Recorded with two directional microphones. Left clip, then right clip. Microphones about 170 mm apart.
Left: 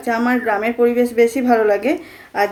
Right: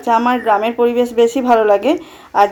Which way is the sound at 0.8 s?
90° right.